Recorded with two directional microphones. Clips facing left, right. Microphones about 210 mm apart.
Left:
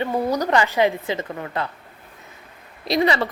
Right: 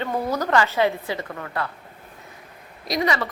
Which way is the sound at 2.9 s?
30° left (ahead or behind).